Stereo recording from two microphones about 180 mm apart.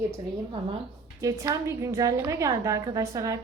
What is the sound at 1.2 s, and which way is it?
A woman's voice, 15° right (ahead or behind).